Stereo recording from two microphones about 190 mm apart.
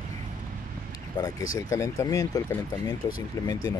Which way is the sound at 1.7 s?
15° left (ahead or behind).